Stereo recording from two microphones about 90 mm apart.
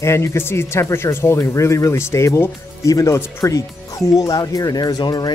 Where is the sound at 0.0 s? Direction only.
30° left (ahead or behind).